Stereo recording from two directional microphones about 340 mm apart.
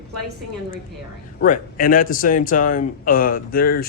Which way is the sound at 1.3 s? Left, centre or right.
Left.